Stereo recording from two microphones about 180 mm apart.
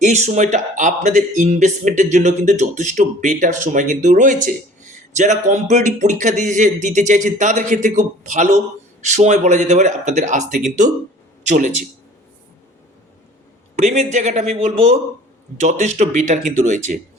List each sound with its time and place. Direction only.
0.0 s a man's voice: 40° right (ahead or behind)
13.7 s a man's voice: 40° right (ahead or behind)